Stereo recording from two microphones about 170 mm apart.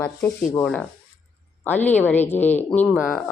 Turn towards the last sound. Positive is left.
turn(degrees=-5)  # may be behind; listen again after turning